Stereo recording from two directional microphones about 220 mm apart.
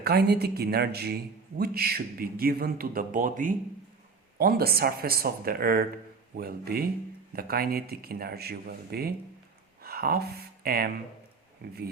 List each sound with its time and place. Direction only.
0.0 s a man's voice: 45° right (ahead or behind)